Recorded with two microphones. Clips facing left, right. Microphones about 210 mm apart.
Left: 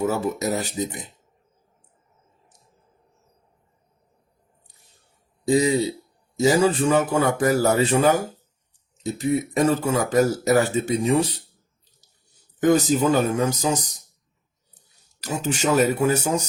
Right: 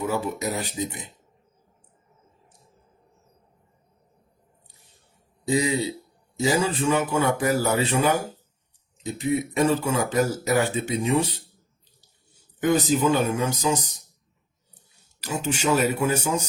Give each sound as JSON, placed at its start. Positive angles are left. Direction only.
{"t": 0.0, "sound": "speech", "side_deg": 40}
{"t": 5.5, "sound": "speech", "side_deg": 40}
{"t": 12.5, "sound": "a sound", "side_deg": 45}
{"t": 12.9, "sound": "speech", "side_deg": 40}
{"t": 15.2, "sound": "speech", "side_deg": 40}